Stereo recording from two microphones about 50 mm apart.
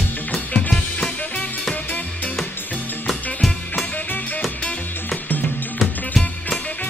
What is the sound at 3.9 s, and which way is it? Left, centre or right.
Music, left.